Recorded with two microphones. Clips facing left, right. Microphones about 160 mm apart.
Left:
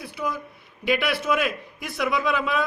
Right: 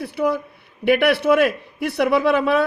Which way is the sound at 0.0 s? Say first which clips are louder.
Right 9 dB; 60° right (ahead or behind).